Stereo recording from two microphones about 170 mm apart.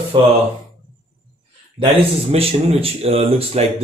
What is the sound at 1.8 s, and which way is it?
Speech, 35° right (ahead or behind).